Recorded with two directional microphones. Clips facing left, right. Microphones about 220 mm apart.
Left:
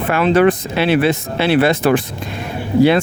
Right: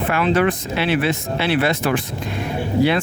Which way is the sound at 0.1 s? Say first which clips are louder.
Left 6 dB; 30° left (ahead or behind).